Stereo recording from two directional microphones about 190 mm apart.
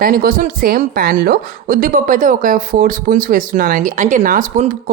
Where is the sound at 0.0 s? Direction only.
50° right (ahead or behind).